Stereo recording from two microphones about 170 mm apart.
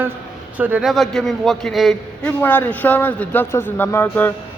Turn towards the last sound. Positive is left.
turn(degrees=15)  # may be behind; listen again after turning